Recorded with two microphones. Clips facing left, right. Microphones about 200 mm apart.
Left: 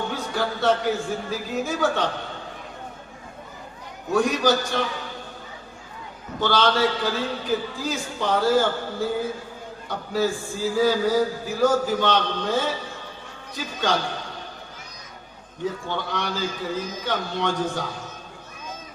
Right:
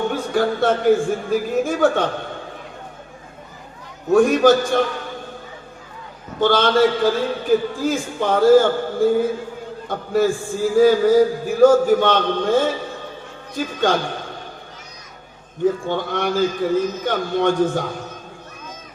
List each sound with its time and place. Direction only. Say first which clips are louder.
0.1 s a man's voice: right 7 dB; 50° right (ahead or behind)
4.1 s a man's voice: right 7 dB; 50° right (ahead or behind)
6.4 s a man's voice: right 6 dB; 50° right (ahead or behind)
15.9 s a man's voice: right 7 dB; 50° right (ahead or behind)